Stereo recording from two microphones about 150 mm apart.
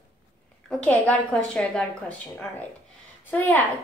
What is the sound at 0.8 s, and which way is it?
A woman's voice, 10° left (ahead or behind).